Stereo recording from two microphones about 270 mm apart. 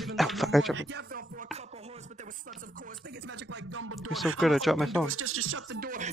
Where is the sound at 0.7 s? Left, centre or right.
Right.